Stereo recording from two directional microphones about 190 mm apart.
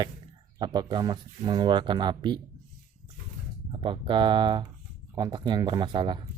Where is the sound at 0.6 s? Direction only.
20° right (ahead or behind).